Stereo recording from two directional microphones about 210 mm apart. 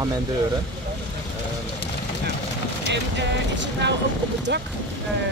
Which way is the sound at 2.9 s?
55° right (ahead or behind).